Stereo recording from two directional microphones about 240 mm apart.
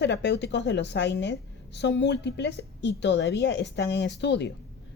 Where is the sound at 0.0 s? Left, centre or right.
Left.